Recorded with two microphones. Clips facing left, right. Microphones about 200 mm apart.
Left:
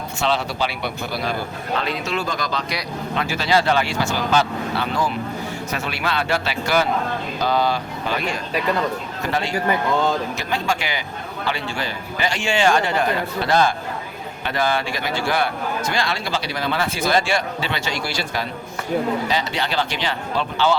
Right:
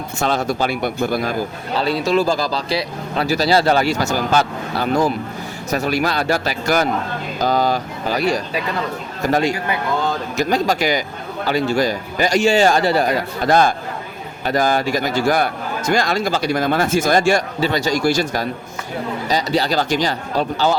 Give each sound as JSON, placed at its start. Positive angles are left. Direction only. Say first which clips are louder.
{"t": 0.2, "sound": "a man's voice", "louder": "right 3 dB", "side_deg": -45}
{"t": 7.3, "sound": "a sound", "louder": "right 3 dB", "side_deg": -45}
{"t": 9.2, "sound": "a man's voice", "louder": "right 4 dB", "side_deg": -40}